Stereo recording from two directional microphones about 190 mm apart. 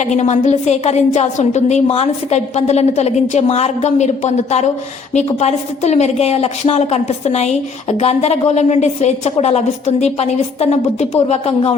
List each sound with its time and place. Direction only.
0.0 s a woman's voice: 35° left (ahead or behind)